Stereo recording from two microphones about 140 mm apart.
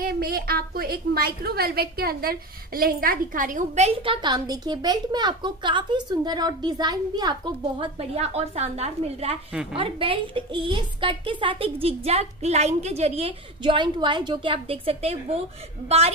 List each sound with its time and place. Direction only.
0.0 s a woman's voice: 90° right; by 7.9 s 30° right (ahead or behind)
8.0 s a woman's voice: 45° right (ahead or behind)
9.5 s a woman's voice: 5° right (ahead or behind)
9.8 s a woman's voice: 40° right (ahead or behind)
13.6 s a woman's voice: 35° right (ahead or behind)